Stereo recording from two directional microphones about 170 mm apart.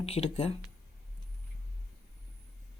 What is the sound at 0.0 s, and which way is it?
Speech, 40° left (ahead or behind).